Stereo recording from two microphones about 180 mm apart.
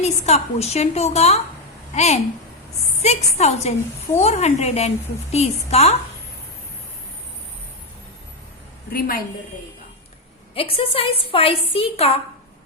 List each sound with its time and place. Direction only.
0.0 s a woman's voice: 35° left (ahead or behind)
8.9 s a woman's voice: 55° left (ahead or behind)
10.5 s a woman's voice: 30° left (ahead or behind)